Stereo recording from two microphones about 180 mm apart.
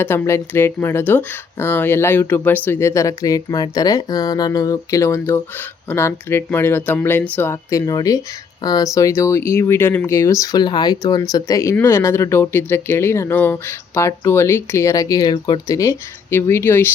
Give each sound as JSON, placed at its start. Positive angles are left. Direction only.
{"t": 0.0, "sound": "speech", "side_deg": 15}